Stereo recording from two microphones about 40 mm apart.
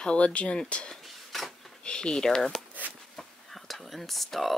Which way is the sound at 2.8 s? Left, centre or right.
Right.